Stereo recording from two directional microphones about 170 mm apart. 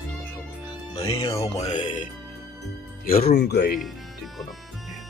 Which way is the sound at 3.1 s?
60° left (ahead or behind).